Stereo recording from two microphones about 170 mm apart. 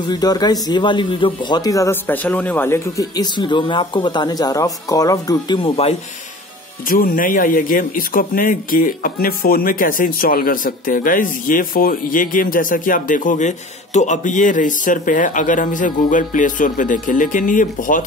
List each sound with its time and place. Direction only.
0.0 s speech: 25° left (ahead or behind)
6.9 s speech: 55° left (ahead or behind)